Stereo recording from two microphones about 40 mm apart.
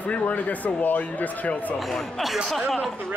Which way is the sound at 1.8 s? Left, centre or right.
Centre.